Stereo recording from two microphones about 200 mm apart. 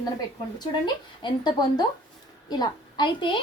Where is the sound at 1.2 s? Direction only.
20° left (ahead or behind).